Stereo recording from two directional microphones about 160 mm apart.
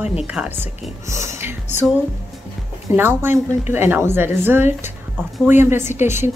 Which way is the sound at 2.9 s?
15° right (ahead or behind).